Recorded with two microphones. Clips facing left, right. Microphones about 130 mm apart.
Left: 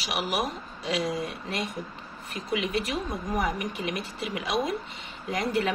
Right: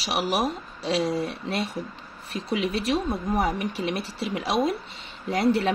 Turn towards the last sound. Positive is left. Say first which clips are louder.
# right 5 dB
turn(degrees=-35)  # may be behind; listen again after turning